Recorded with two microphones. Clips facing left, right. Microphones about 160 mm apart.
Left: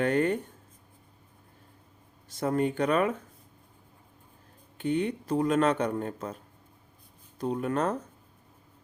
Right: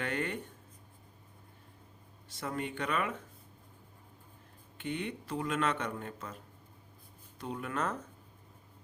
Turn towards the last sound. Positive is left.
turn(degrees=35)  # may be behind; listen again after turning